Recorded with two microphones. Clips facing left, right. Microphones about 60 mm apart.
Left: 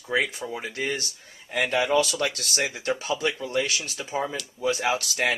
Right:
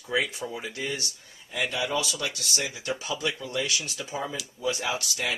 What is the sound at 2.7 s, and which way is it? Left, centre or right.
Speech, left.